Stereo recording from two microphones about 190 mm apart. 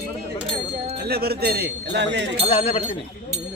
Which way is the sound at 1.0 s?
55° right (ahead or behind).